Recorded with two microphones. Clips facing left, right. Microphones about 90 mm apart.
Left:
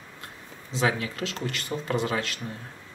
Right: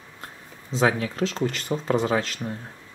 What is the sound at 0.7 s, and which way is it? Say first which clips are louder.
Speech: right 4 dB; 30° right (ahead or behind).